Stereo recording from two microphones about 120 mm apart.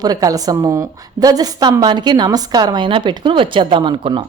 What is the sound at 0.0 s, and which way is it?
A woman's voice, 30° right (ahead or behind).